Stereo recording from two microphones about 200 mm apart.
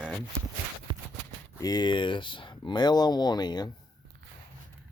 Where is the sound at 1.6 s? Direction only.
20° left (ahead or behind).